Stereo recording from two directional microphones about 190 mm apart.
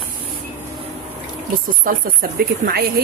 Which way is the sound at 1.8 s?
50° right (ahead or behind).